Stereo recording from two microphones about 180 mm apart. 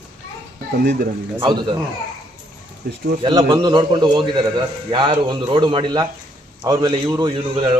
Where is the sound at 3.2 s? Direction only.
25° right (ahead or behind).